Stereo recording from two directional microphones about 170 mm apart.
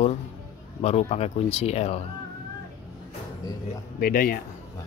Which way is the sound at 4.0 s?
55° left (ahead or behind).